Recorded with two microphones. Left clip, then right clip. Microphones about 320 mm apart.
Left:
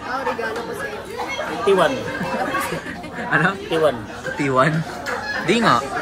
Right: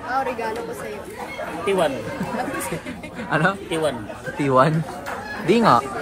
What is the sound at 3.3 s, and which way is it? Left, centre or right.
Speech, centre.